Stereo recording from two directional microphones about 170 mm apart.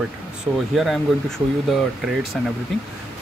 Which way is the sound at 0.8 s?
Centre (ahead or behind).